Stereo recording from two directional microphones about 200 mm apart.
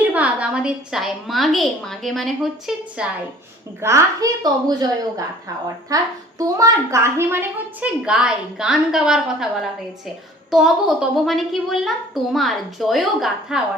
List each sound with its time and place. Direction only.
0.1 s a woman's voice: 5° right (ahead or behind)
3.8 s a woman's voice: 15° right (ahead or behind)